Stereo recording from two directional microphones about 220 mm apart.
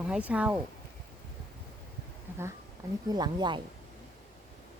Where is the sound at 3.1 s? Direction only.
20° right (ahead or behind).